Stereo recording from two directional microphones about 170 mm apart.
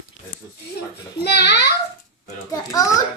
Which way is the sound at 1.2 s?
80° left.